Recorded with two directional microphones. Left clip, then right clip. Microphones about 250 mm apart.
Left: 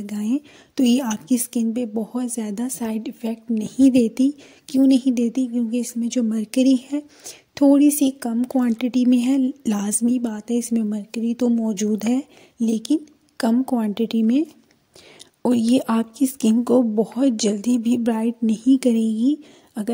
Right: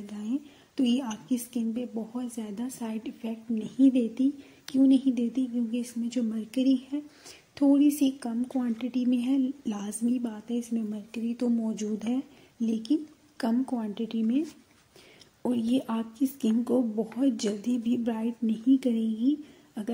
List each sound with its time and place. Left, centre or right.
0.0 s speech: left
15.4 s speech: left